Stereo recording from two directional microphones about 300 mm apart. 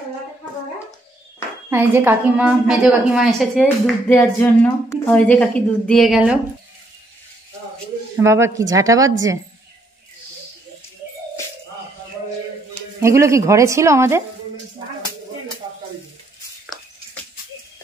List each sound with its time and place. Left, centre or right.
1.7 s a woman's voice: centre
8.2 s speech: centre
13.0 s speech: centre
16.6 s a sound: centre